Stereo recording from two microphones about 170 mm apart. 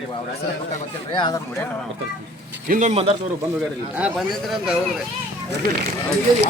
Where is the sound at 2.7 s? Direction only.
45° right (ahead or behind).